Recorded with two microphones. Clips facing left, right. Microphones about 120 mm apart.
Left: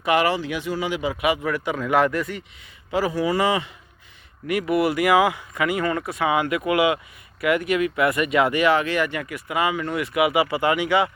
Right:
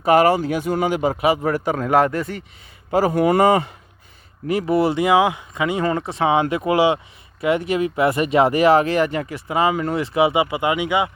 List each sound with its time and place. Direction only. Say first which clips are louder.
0.0 s speech: right 6 dB; 40° right (ahead or behind)
2.9 s speech: right 5 dB; 50° right (ahead or behind)
4.4 s speech: right 3 dB; 30° right (ahead or behind)